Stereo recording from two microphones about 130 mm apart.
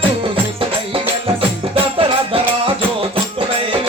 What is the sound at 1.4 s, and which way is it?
Music, 45° right (ahead or behind).